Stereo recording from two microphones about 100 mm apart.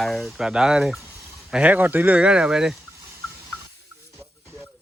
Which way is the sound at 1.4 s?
10° right (ahead or behind).